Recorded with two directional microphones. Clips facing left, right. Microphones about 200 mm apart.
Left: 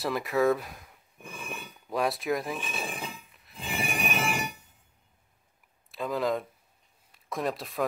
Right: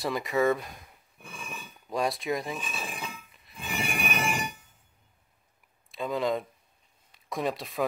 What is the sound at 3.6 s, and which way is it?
Train, 25° left (ahead or behind).